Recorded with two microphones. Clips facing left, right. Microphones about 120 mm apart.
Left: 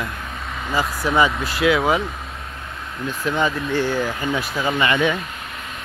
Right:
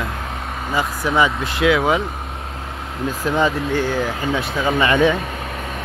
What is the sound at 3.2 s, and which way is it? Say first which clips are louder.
Speech: right 2 dB; 30° right (ahead or behind).